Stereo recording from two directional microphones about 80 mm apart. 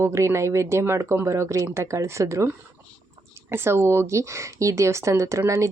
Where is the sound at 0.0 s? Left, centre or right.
Right.